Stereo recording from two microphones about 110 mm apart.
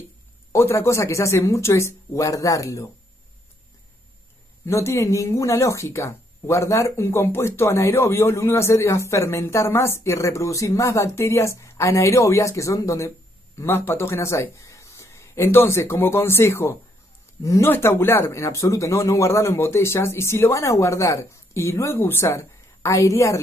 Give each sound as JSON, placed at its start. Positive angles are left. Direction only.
{"t": 0.5, "sound": "speech", "side_deg": 25}
{"t": 4.6, "sound": "speech", "side_deg": 25}